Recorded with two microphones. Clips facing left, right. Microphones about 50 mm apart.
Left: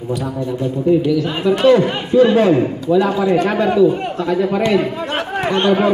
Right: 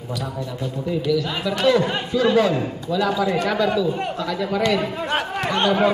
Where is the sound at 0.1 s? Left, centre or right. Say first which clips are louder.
Left 7 dB; left.